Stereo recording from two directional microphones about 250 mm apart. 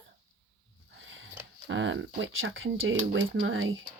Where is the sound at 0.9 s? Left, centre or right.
Right.